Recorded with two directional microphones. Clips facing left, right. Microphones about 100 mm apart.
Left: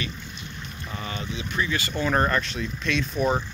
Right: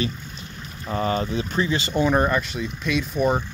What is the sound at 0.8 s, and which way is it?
Speech, 40° right (ahead or behind).